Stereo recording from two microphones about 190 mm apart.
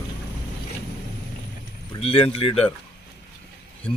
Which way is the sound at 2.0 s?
30° left (ahead or behind).